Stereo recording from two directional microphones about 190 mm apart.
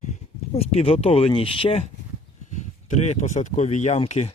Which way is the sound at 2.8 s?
35° left (ahead or behind).